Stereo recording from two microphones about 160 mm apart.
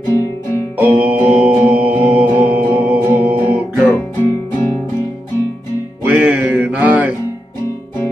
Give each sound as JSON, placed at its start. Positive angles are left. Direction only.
{"t": 0.7, "sound": "music", "side_deg": -10}
{"t": 3.9, "sound": "music", "side_deg": 15}
{"t": 6.0, "sound": "music", "side_deg": -10}